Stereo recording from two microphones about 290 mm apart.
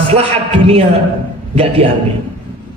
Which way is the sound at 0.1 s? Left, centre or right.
Right.